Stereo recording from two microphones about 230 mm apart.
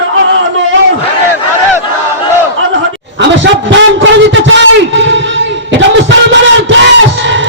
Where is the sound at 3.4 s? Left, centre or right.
Right.